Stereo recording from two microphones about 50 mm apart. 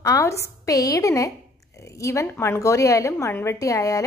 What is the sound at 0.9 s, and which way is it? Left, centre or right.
A woman's voice, left.